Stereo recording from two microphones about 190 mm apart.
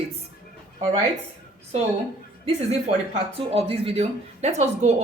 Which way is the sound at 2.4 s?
35° right (ahead or behind).